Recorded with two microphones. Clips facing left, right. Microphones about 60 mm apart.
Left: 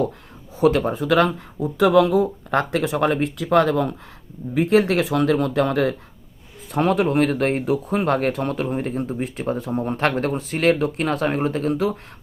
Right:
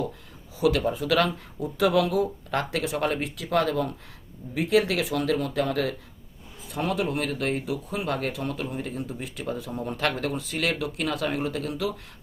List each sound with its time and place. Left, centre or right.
0.5 s speech: left
2.5 s speech: left